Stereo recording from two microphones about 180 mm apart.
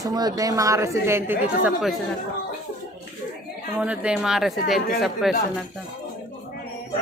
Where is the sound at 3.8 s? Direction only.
5° right (ahead or behind).